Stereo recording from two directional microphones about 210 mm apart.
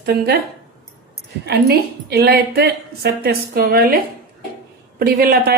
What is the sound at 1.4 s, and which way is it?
Speech, 50° right (ahead or behind).